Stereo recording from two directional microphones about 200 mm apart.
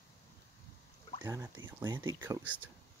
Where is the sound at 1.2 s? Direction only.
20° right (ahead or behind).